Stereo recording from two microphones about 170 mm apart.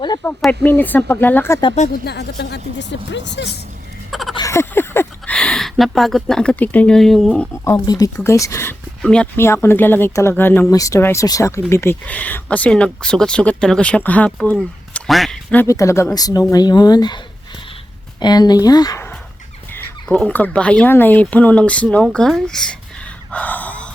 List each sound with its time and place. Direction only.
0.3 s speech: 10° left (ahead or behind)
2.0 s speech: 75° left (ahead or behind); by 3.6 s 90° left
4.1 s a sound: centre (ahead or behind)
4.4 s speech: 15° left (ahead or behind)
9.0 s speech: 5° left (ahead or behind)
15.6 s speech: 20° left (ahead or behind)
18.2 s speech: 25° left (ahead or behind)
19.7 s speech: 10° left (ahead or behind)
23.3 s gasp: 10° left (ahead or behind)